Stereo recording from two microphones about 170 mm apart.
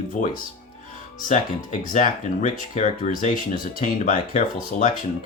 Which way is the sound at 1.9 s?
45° left (ahead or behind).